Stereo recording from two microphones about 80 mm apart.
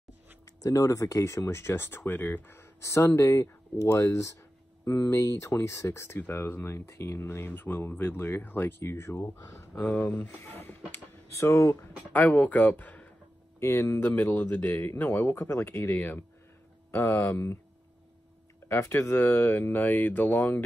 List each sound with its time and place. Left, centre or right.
0.6 s speech: left
11.3 s speech: left
11.7 s speech: left
13.6 s speech: left
18.7 s speech: left